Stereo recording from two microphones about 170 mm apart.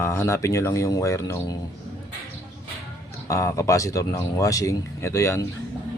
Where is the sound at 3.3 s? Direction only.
15° left (ahead or behind).